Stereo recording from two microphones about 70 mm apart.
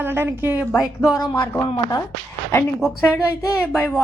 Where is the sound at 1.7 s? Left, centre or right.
Left.